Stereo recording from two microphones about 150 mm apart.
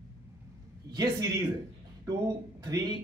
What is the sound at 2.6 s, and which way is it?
Speech, 25° right (ahead or behind).